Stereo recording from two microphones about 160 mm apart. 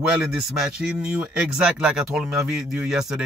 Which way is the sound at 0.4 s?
5° right (ahead or behind).